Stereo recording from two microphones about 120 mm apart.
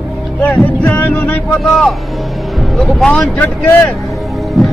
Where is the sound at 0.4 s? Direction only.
10° left (ahead or behind).